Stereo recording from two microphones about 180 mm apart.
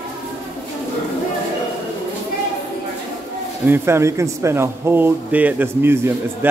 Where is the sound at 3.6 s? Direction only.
15° right (ahead or behind).